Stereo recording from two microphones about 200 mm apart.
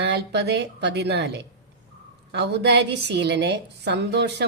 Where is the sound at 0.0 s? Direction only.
55° right (ahead or behind).